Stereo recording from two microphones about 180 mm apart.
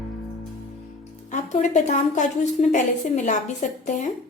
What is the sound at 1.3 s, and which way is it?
A woman's voice, 40° left (ahead or behind).